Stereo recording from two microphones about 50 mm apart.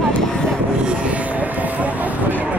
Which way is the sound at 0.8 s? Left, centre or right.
Right.